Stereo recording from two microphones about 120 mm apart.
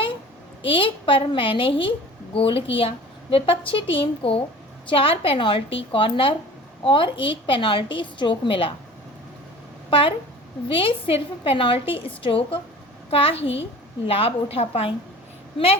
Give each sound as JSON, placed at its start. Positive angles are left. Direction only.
{"t": 0.7, "sound": "a woman's voice", "side_deg": 45}
{"t": 9.9, "sound": "a woman's voice", "side_deg": 50}